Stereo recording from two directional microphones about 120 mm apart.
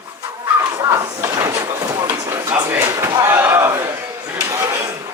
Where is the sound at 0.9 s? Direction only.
25° right (ahead or behind).